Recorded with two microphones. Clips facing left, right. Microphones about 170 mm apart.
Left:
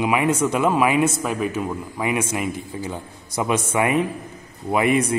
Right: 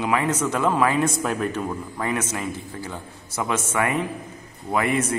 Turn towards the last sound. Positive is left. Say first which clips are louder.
# left 4 dB
turn(degrees=15)  # may be behind; listen again after turning